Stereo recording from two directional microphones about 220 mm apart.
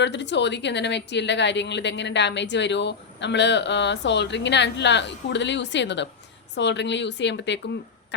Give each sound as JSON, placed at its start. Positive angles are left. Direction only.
{"t": 0.0, "sound": "a woman's voice", "side_deg": 55}